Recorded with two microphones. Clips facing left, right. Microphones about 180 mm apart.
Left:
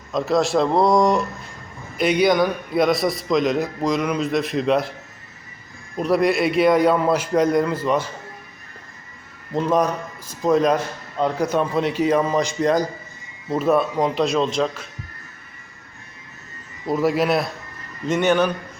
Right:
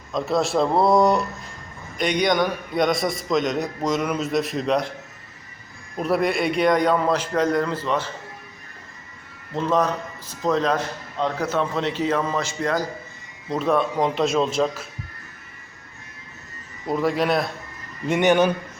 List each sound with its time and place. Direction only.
0.1 s a man's voice: centre (ahead or behind)
6.0 s a man's voice: centre (ahead or behind)
9.6 s a man's voice: 10° left (ahead or behind)
13.5 s a man's voice: 5° left (ahead or behind)
16.8 s a man's voice: 5° left (ahead or behind)
18.0 s speech: 15° right (ahead or behind)